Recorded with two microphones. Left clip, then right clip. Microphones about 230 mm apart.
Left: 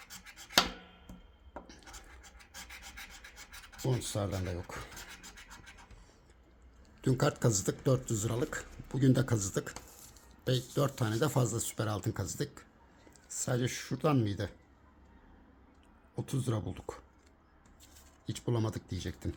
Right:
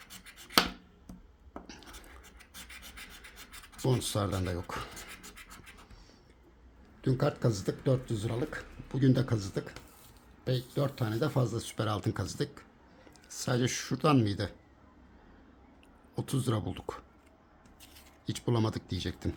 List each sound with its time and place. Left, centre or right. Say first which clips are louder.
3.8 s speech: right 4 dB; centre
7.0 s speech: even; centre
16.1 s speech: right 3 dB; centre
18.3 s speech: right 4 dB; centre